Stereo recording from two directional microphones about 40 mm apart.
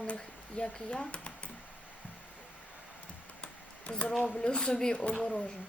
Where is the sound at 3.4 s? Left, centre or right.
Left.